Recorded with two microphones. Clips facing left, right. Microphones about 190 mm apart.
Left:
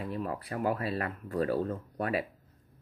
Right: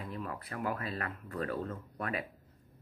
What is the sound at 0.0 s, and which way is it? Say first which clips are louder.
Speech: left 6 dB; 30° left (ahead or behind).